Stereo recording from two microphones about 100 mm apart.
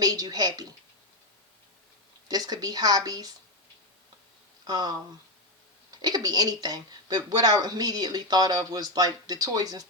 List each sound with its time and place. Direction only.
0.0 s a woman's voice: 40° right (ahead or behind)
2.2 s speech: 40° right (ahead or behind)
4.6 s speech: 40° right (ahead or behind)
6.0 s speech: 40° right (ahead or behind)